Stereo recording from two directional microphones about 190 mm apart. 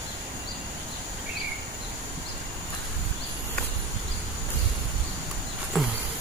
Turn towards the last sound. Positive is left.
turn(degrees=0)  # may be behind; listen again after turning